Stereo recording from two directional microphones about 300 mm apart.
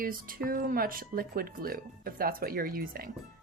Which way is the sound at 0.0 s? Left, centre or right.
Right.